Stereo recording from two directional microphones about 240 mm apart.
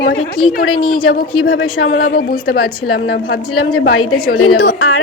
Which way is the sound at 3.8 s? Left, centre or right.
Left.